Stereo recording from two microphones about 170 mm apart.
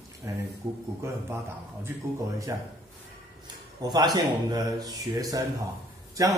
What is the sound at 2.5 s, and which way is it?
Speech, 20° right (ahead or behind).